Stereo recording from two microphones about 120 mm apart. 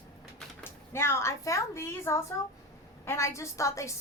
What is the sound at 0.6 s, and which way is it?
A woman's voice, 20° left (ahead or behind).